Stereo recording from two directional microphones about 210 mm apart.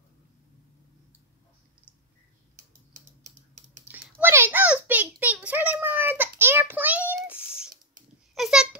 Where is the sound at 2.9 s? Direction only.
35° right (ahead or behind).